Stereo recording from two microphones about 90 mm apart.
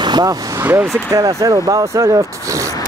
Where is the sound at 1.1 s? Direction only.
40° right (ahead or behind).